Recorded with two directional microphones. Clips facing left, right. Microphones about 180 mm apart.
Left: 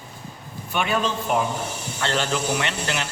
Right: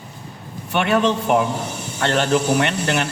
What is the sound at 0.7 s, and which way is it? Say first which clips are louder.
Speech: right 6 dB; 65° right (ahead or behind).